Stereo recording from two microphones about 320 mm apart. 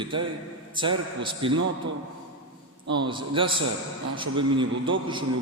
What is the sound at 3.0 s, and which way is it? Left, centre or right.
A man's voice, centre.